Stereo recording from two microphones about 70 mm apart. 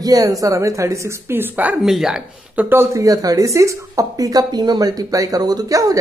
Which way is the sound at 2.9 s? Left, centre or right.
Right.